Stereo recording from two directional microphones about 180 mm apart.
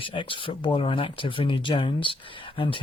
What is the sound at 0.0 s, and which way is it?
Speech, 30° left (ahead or behind).